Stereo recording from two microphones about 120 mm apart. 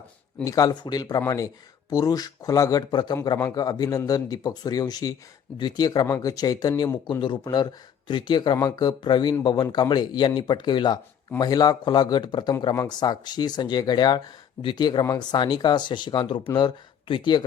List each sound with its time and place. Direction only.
0.4 s speech: 30° left (ahead or behind)
6.1 s speech: 20° left (ahead or behind)
6.3 s speech: 35° left (ahead or behind)